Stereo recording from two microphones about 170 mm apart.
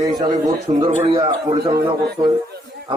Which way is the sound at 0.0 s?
20° right (ahead or behind).